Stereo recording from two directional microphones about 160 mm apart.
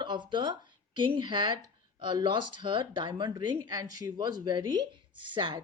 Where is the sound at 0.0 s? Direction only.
30° right (ahead or behind).